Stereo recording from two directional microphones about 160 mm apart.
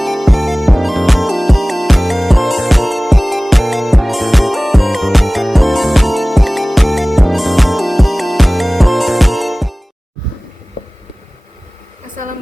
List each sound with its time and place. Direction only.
0.0 s music: centre (ahead or behind)
12.1 s hair dryer: 55° right (ahead or behind)